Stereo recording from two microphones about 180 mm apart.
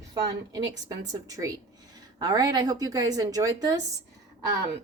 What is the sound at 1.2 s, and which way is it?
A woman's voice, 20° right (ahead or behind).